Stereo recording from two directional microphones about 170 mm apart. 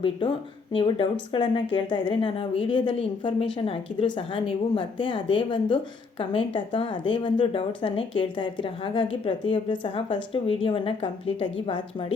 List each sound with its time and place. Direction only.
0.0 s a woman's voice: 30° left (ahead or behind)